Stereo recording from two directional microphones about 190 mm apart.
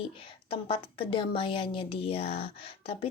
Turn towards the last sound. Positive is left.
turn(degrees=30)  # may be behind; listen again after turning